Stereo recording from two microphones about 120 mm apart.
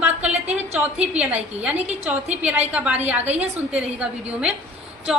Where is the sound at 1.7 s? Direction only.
65° right (ahead or behind).